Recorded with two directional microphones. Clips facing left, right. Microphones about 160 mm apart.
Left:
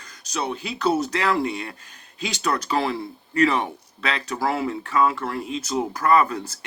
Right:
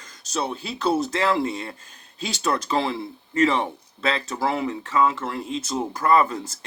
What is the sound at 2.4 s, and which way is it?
Speech, 25° right (ahead or behind).